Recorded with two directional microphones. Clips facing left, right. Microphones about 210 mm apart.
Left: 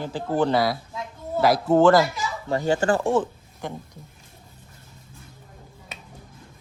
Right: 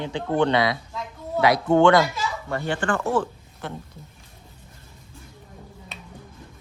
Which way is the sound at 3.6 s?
15° left (ahead or behind).